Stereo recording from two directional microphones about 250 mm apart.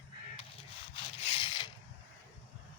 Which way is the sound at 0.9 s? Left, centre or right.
Left.